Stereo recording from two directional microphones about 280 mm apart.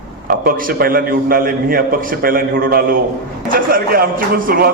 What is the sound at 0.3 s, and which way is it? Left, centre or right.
A man's voice, right.